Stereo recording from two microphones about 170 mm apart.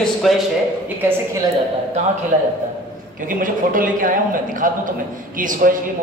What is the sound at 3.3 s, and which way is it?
A man's voice, 50° right (ahead or behind).